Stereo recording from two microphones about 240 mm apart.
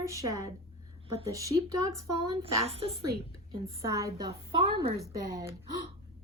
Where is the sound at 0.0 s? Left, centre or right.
Centre.